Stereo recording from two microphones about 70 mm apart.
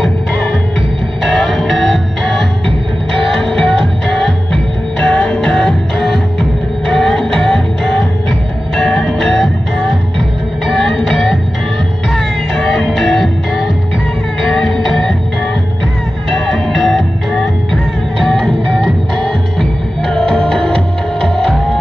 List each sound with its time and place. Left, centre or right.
1.2 s music: centre
14.4 s music: centre
16.3 s music: centre